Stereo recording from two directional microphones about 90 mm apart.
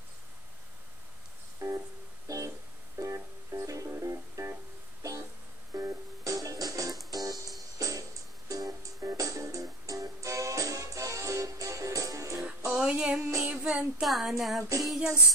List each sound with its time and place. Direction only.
1.6 s music: 35° right (ahead or behind)
5.8 s music: 35° right (ahead or behind)
12.7 s music: 10° right (ahead or behind)
13.2 s child singing: 25° right (ahead or behind)
14.0 s a sound: centre (ahead or behind)
14.9 s music: 5° right (ahead or behind)